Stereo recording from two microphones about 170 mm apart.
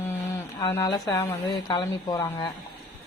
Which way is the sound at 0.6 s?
15° left (ahead or behind).